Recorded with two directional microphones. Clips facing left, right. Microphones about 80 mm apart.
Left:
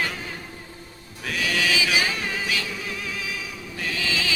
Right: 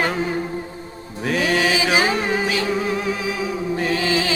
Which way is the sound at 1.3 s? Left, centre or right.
Right.